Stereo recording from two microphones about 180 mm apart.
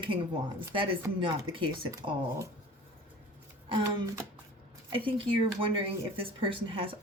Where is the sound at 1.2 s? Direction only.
30° right (ahead or behind).